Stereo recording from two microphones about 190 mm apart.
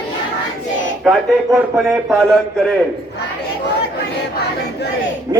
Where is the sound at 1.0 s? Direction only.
5° right (ahead or behind).